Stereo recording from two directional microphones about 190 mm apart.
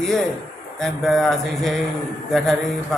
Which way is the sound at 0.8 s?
Centre (ahead or behind).